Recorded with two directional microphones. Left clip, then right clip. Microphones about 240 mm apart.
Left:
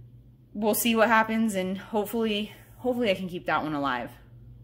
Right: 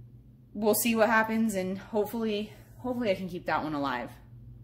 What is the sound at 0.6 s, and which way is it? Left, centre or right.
A woman's voice, centre.